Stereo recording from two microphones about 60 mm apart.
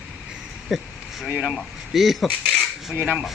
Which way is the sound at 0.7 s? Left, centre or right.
Centre.